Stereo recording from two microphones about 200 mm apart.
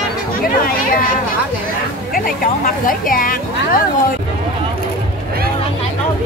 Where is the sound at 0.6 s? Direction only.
45° left (ahead or behind).